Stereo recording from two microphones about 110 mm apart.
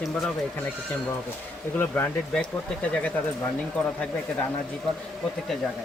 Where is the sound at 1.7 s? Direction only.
20° left (ahead or behind).